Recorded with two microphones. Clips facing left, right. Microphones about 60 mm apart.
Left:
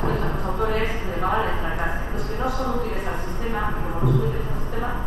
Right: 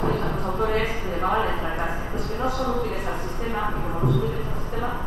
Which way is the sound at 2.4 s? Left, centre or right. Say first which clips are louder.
Even; left.